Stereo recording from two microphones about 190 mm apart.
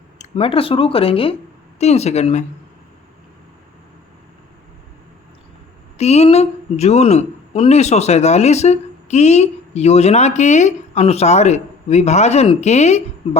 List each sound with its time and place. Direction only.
0.2 s a woman's voice: 30° left (ahead or behind)
6.0 s a woman's voice: 35° left (ahead or behind)